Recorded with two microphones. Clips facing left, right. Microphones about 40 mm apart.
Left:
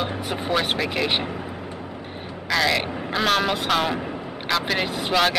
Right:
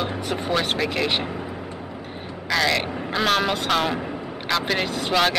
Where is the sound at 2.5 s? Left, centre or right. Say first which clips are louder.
Even; centre.